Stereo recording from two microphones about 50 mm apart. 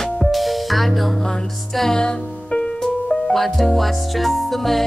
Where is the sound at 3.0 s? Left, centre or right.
Centre.